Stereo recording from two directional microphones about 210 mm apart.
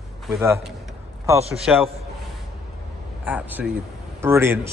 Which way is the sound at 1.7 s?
5° right (ahead or behind).